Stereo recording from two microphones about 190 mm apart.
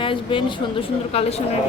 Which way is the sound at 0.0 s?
25° left (ahead or behind).